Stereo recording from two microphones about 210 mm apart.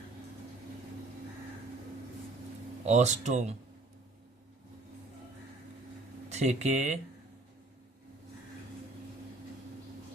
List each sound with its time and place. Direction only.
2.8 s speech: 35° right (ahead or behind)
6.2 s speech: 35° right (ahead or behind)